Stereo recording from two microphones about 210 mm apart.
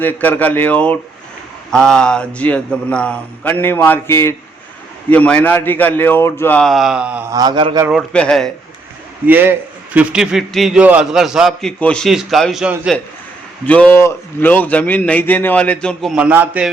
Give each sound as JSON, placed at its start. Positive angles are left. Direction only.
{"t": 0.0, "sound": "a man's voice", "side_deg": 10}
{"t": 7.3, "sound": "a man's voice", "side_deg": -20}
{"t": 7.9, "sound": "a man's voice", "side_deg": 5}
{"t": 9.2, "sound": "a man's voice", "side_deg": -10}
{"t": 13.7, "sound": "a man's voice", "side_deg": 5}